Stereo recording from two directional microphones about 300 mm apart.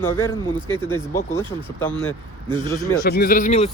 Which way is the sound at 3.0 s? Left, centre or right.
Left.